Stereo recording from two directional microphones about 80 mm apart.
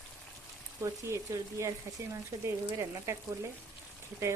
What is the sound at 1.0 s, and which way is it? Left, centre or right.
Speech, right.